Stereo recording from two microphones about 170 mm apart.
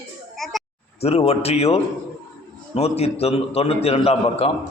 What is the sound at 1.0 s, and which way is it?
A man's voice, 35° left (ahead or behind).